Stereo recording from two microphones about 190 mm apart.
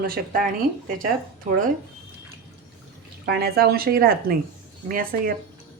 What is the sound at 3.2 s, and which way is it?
A woman's voice, 55° right (ahead or behind).